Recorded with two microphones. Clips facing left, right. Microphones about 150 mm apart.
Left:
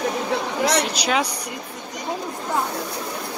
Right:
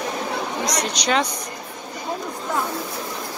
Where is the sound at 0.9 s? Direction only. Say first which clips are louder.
Right 1 dB; 5° left (ahead or behind).